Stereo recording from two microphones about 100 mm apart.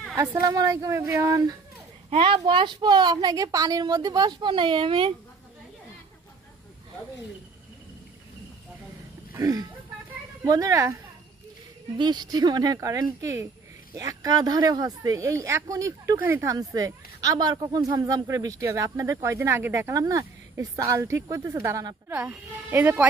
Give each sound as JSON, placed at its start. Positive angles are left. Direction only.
{"t": 0.2, "sound": "speech", "side_deg": -35}
{"t": 1.3, "sound": "speech", "side_deg": -40}
{"t": 2.0, "sound": "a woman's voice", "side_deg": -65}
{"t": 9.4, "sound": "speech", "side_deg": -40}
{"t": 11.9, "sound": "speech", "side_deg": -45}
{"t": 16.6, "sound": "speech", "side_deg": -35}
{"t": 19.9, "sound": "speech", "side_deg": -35}
{"t": 22.1, "sound": "speech", "side_deg": -15}